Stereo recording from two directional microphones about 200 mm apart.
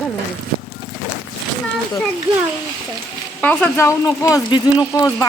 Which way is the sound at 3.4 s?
10° left (ahead or behind).